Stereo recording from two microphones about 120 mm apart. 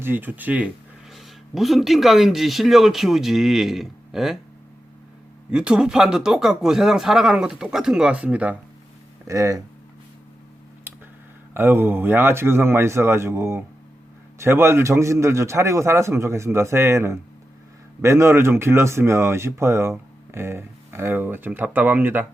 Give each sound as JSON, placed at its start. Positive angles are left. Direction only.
{"t": 0.0, "sound": "speech", "side_deg": -15}
{"t": 1.1, "sound": "speech", "side_deg": 0}
{"t": 5.5, "sound": "speech", "side_deg": -10}
{"t": 9.2, "sound": "a man's voice", "side_deg": -25}
{"t": 10.9, "sound": "a sound", "side_deg": -20}
{"t": 11.5, "sound": "a man's voice", "side_deg": -20}